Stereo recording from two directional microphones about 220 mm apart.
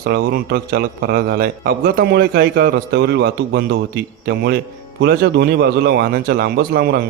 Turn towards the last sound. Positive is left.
turn(degrees=-45)  # may be behind; listen again after turning